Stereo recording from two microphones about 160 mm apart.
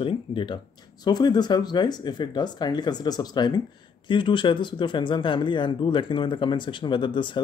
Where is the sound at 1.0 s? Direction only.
25° left (ahead or behind).